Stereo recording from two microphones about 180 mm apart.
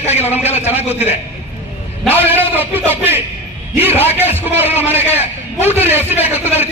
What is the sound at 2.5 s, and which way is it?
Speech, 10° right (ahead or behind).